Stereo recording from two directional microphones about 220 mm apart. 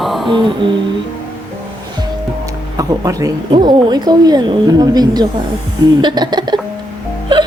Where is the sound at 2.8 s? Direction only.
15° right (ahead or behind).